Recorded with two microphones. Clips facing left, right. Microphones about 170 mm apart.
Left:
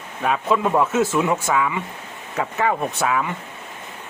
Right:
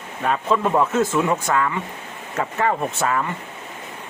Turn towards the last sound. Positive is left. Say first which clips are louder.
# even
turn(degrees=0)  # may be behind; listen again after turning